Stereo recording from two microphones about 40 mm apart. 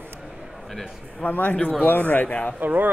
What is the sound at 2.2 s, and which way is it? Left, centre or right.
Speech, left.